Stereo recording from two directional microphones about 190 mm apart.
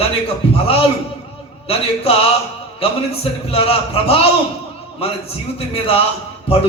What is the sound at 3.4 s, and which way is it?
A man's voice, 30° left (ahead or behind).